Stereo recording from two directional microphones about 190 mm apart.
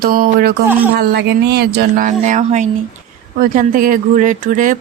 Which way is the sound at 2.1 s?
40° right (ahead or behind).